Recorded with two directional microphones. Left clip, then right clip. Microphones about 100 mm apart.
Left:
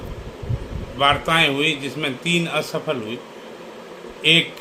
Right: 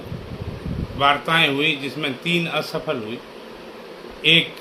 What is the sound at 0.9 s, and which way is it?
A man's voice, 25° left (ahead or behind).